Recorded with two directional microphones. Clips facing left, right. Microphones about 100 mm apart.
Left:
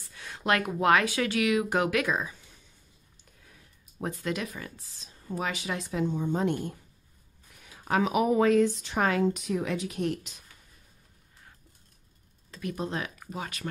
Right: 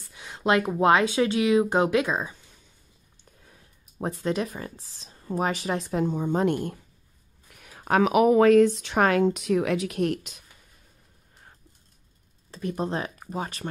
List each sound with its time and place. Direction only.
0.1 s speech: 20° right (ahead or behind)
4.0 s a woman's voice: 30° right (ahead or behind); by 10.3 s 60° right (ahead or behind)
12.4 s speech: 35° right (ahead or behind)